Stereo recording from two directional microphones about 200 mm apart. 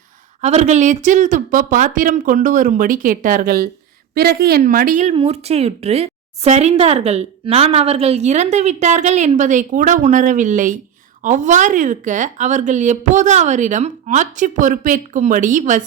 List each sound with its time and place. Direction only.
0.4 s speech: 35° right (ahead or behind)
5.1 s a woman's voice: 30° right (ahead or behind)